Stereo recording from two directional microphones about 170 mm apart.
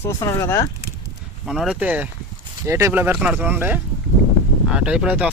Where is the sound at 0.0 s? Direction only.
15° left (ahead or behind).